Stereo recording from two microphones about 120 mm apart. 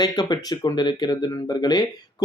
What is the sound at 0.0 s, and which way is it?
Speech, 35° left (ahead or behind).